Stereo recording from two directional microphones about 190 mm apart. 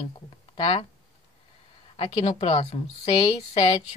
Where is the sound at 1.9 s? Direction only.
30° left (ahead or behind).